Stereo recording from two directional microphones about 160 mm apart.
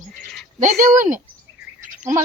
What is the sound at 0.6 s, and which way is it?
Speech, 55° right (ahead or behind).